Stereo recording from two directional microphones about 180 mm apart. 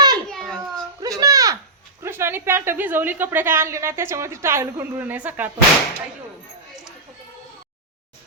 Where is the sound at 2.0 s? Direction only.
15° right (ahead or behind).